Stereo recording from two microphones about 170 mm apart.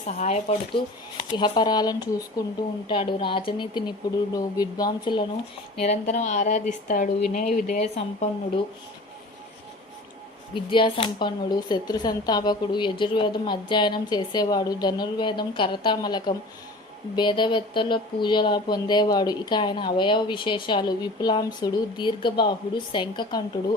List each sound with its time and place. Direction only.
0.1 s speech: 40° left (ahead or behind)
1.3 s speech: 25° left (ahead or behind)
5.8 s speech: 40° left (ahead or behind)
10.5 s speech: 30° left (ahead or behind)